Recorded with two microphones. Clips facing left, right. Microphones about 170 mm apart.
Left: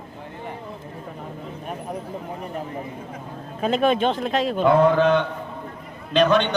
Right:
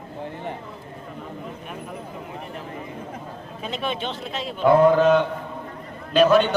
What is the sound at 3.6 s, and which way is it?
Speech, 50° left (ahead or behind).